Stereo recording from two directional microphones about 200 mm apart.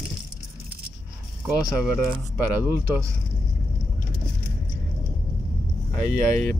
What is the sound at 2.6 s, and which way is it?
Speech, 10° right (ahead or behind).